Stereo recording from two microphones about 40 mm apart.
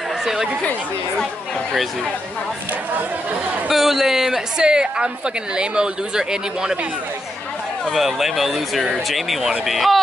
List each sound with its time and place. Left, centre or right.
0.2 s speech: centre
3.7 s a man's voice: centre
4.6 s a woman's voice: centre
7.9 s speech: centre